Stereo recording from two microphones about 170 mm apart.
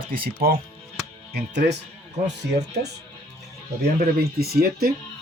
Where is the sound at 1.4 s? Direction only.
85° right.